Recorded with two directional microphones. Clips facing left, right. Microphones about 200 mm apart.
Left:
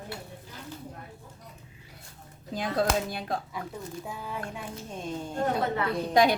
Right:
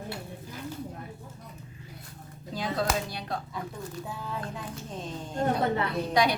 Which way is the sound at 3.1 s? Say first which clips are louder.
Left 3 dB; 50° left (ahead or behind).